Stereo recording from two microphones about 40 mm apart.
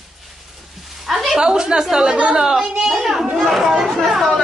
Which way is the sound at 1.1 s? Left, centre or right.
Centre.